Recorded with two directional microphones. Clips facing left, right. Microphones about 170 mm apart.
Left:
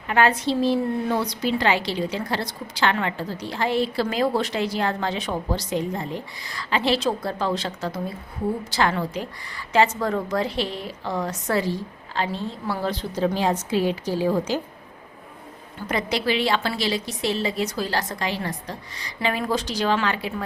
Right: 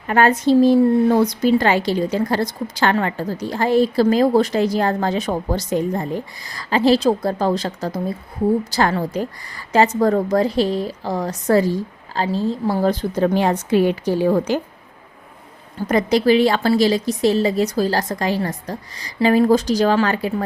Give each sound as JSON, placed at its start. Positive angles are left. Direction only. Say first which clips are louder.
{"t": 0.1, "sound": "a woman's voice", "louder": "right 6 dB", "side_deg": -45}
{"t": 15.9, "sound": "a woman's voice", "louder": "right 9 dB", "side_deg": -45}